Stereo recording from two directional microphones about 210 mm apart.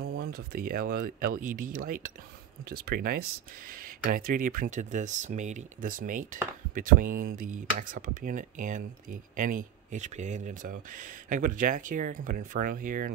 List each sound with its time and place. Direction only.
0.3 s speech: 45° right (ahead or behind)
2.8 s speech: 45° right (ahead or behind)